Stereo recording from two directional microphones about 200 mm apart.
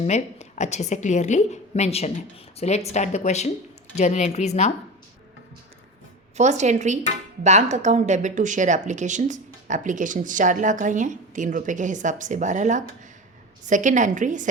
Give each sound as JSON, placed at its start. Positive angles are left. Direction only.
{"t": 0.0, "sound": "a woman's voice", "side_deg": 35}
{"t": 6.3, "sound": "speech", "side_deg": -35}